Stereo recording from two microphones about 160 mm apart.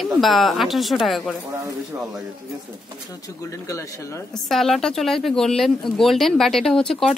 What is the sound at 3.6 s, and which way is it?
Speech, 20° left (ahead or behind).